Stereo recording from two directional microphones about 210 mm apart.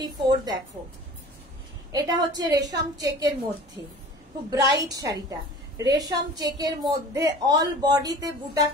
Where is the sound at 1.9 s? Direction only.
20° right (ahead or behind).